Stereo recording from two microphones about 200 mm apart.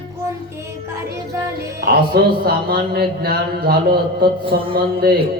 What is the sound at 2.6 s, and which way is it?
Mantra, 50° right (ahead or behind).